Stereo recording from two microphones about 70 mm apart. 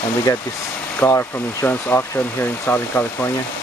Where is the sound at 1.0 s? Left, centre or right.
Left.